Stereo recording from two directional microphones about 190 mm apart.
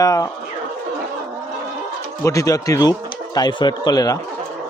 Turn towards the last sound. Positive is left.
turn(degrees=20)  # may be behind; listen again after turning